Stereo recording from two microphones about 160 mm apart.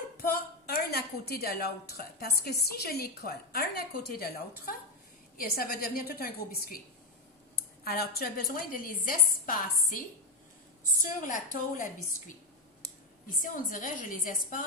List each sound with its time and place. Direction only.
0.2 s a woman's voice: 70° left (ahead or behind); by 14.6 s 55° left (ahead or behind)